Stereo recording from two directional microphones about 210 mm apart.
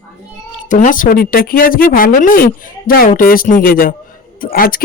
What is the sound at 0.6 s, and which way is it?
Speech, 40° left (ahead or behind).